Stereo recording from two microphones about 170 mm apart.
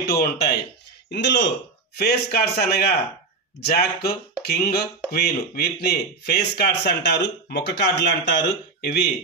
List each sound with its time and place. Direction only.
0.0 s speech: 65° left (ahead or behind)
1.1 s speech: 90° left
2.0 s speech: 70° left (ahead or behind)